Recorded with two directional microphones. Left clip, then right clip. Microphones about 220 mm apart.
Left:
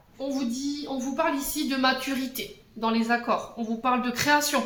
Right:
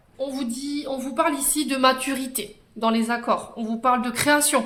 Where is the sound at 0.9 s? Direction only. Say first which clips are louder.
Right 3 dB; 50° right (ahead or behind).